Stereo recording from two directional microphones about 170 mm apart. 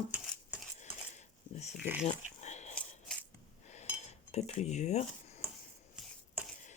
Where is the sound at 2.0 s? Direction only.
45° left (ahead or behind).